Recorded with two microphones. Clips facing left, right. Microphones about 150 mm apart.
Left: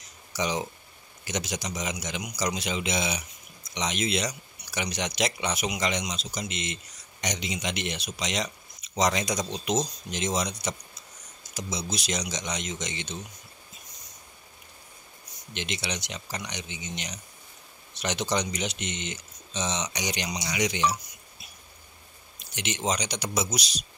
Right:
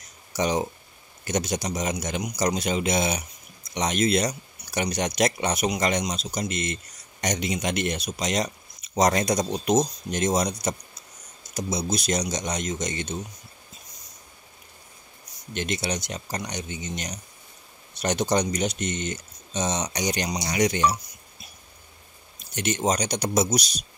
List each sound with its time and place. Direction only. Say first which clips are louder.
0.3 s speech: right 5 dB; 50° right (ahead or behind)
15.5 s speech: right 6 dB; 45° right (ahead or behind)
22.4 s speech: right 6 dB; 45° right (ahead or behind)